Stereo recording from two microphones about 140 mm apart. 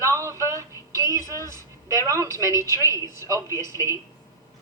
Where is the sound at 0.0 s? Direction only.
20° right (ahead or behind).